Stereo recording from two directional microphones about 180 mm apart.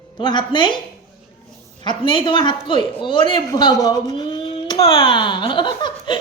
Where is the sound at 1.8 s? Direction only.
25° left (ahead or behind).